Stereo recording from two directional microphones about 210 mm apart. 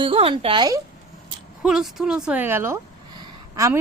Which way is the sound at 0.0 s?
25° right (ahead or behind).